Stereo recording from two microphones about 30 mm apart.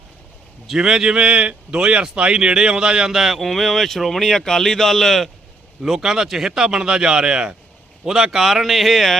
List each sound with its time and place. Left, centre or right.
0.8 s speech: right
3.1 s speech: centre
3.4 s speech: centre
5.8 s speech: centre; by 7.5 s right
8.0 s speech: centre
8.7 s speech: centre